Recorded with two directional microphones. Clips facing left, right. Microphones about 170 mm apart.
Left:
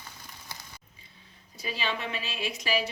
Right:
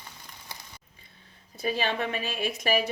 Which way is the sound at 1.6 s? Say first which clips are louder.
Right 5 dB; 50° right (ahead or behind).